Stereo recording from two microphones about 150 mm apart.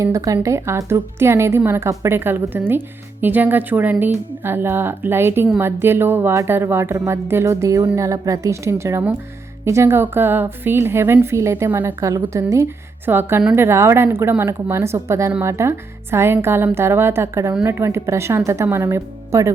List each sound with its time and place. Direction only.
0.0 s a woman's voice: 20° right (ahead or behind)